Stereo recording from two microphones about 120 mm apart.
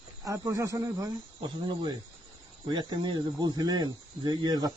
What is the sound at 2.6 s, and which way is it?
Speech, 35° right (ahead or behind).